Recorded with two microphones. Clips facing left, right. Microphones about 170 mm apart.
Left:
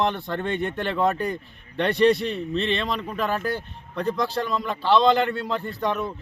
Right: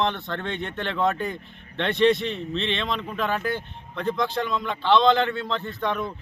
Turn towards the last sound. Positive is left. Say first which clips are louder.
# left 1 dB
turn(degrees=10)  # may be behind; listen again after turning